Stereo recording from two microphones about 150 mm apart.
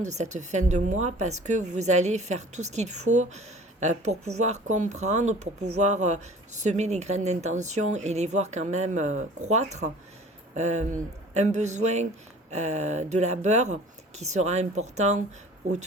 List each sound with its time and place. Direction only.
0.0 s a woman's voice: 50° right (ahead or behind)